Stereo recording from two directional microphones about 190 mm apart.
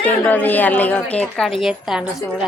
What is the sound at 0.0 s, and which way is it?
A woman's voice, 10° left (ahead or behind).